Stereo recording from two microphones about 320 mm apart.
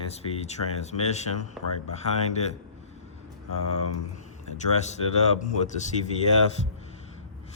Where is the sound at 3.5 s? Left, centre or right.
Left.